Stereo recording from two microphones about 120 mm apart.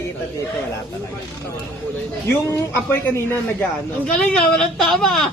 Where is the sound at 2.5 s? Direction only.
20° left (ahead or behind).